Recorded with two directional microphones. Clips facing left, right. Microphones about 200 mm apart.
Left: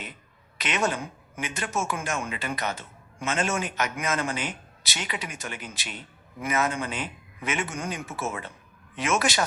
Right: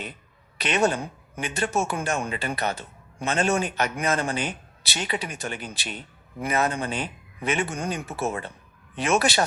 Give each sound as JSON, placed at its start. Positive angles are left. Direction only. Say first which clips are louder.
{"t": 0.6, "sound": "speech", "louder": "right 4 dB", "side_deg": -35}